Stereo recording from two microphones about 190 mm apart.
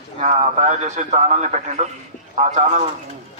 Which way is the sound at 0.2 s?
40° right (ahead or behind).